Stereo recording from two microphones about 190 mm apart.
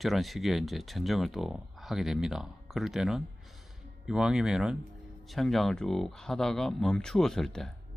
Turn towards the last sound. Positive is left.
turn(degrees=0)  # may be behind; listen again after turning